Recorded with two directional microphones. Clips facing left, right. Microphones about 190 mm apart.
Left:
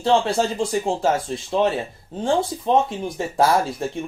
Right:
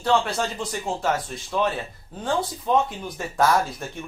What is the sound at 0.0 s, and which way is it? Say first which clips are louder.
Speech: left 4 dB; 25° left (ahead or behind).